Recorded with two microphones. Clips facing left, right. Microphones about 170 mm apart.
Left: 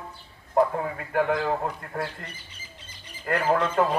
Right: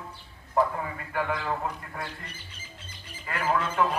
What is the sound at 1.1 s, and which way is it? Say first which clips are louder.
Speech: left 6 dB; 50° left (ahead or behind).